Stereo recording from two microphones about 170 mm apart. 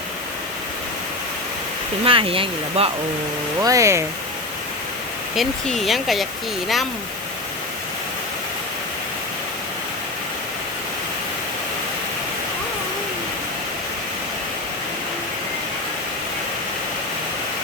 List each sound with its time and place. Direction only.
2.0 s speech: 30° right (ahead or behind)
3.6 s speech: 20° right (ahead or behind)
5.4 s speech: centre (ahead or behind)